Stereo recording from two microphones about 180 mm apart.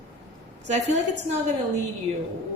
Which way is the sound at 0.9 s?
40° right (ahead or behind).